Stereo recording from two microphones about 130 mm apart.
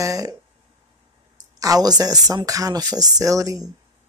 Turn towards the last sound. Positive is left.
turn(degrees=-25)  # may be behind; listen again after turning